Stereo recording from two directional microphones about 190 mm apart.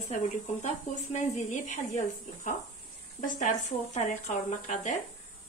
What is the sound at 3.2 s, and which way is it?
Speech, 40° left (ahead or behind).